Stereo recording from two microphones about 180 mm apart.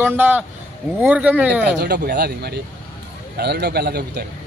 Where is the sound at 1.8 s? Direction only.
65° right (ahead or behind).